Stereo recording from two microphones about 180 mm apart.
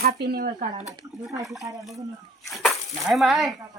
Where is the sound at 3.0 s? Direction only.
Centre (ahead or behind).